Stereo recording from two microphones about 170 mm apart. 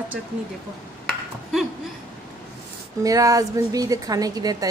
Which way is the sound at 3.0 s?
20° right (ahead or behind).